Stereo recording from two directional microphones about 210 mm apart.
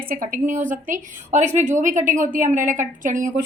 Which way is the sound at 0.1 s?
40° right (ahead or behind).